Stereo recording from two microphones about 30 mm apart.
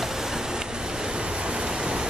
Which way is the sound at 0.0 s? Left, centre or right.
Centre.